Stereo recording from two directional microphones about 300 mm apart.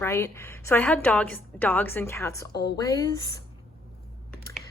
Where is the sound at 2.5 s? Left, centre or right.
Left.